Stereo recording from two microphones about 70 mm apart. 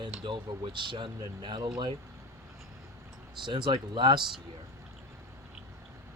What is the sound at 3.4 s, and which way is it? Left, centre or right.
Speech, right.